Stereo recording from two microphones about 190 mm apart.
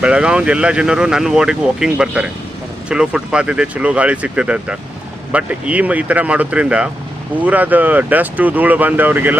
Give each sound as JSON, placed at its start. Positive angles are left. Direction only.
{"t": 0.0, "sound": "speech", "side_deg": -5}